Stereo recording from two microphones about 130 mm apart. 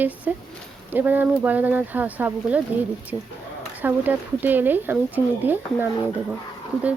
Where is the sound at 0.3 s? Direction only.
10° right (ahead or behind).